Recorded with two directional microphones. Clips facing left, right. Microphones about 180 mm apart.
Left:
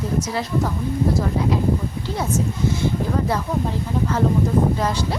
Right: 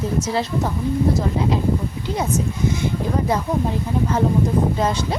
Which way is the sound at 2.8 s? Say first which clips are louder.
Even; 20° right (ahead or behind).